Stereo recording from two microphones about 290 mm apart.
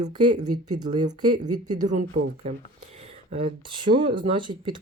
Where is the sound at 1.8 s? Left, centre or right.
Right.